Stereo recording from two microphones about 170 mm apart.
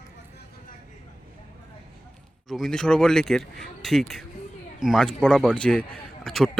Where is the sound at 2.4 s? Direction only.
Centre (ahead or behind).